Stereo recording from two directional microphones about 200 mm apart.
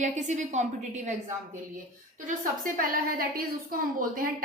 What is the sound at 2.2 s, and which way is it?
A woman's voice, 45° right (ahead or behind).